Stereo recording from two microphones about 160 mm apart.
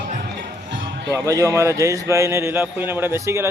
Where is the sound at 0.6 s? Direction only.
90° right.